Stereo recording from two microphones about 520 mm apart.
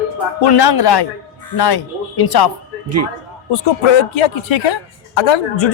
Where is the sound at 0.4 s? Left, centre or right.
Left.